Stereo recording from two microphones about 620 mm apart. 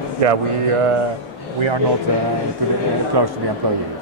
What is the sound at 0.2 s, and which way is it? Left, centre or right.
Speech, right.